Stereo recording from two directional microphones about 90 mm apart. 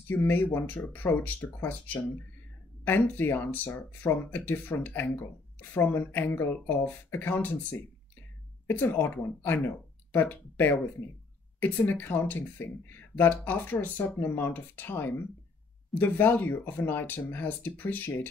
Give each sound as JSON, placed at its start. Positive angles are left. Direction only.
{"t": 0.1, "sound": "speech", "side_deg": 20}
{"t": 8.6, "sound": "speech", "side_deg": 20}